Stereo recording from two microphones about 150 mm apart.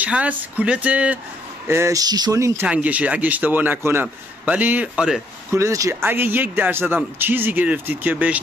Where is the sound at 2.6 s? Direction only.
10° right (ahead or behind).